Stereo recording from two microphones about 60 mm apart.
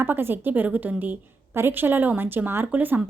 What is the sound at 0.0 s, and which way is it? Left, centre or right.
A woman's voice, right.